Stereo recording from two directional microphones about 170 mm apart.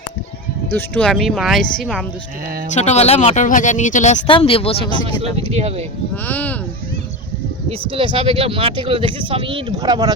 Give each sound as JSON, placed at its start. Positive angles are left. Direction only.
{"t": 0.7, "sound": "speech", "side_deg": 10}
{"t": 2.7, "sound": "speech", "side_deg": 40}
{"t": 4.3, "sound": "speech", "side_deg": 30}
{"t": 5.2, "sound": "speech", "side_deg": -40}
{"t": 6.2, "sound": "speech", "side_deg": 10}
{"t": 7.7, "sound": "speech", "side_deg": -30}